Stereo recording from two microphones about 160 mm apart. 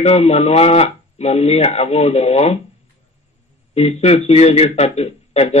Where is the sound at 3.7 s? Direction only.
40° left (ahead or behind).